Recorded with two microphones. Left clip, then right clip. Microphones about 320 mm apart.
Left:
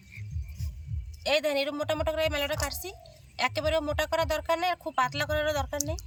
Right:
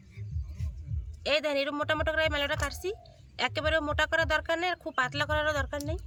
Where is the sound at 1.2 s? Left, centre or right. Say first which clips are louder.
Left 1 dB; centre.